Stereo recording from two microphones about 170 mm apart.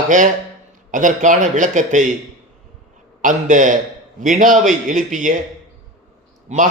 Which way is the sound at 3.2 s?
50° right (ahead or behind).